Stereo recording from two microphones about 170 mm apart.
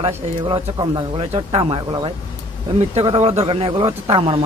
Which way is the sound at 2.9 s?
35° right (ahead or behind).